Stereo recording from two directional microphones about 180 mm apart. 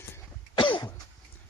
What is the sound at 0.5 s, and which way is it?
Cough, 25° left (ahead or behind).